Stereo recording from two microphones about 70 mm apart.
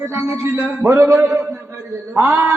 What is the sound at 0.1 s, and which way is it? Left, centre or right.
A man's voice, right.